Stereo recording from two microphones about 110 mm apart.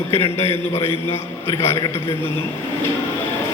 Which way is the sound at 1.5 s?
25° left (ahead or behind).